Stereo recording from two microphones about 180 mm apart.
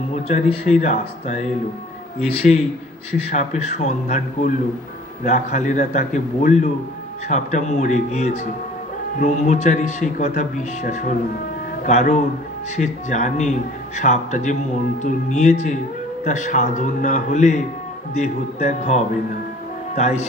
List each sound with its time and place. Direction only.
0.1 s a man's voice: 35° left (ahead or behind)